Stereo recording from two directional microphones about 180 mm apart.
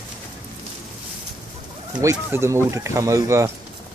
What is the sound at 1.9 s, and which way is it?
Speech, 15° right (ahead or behind).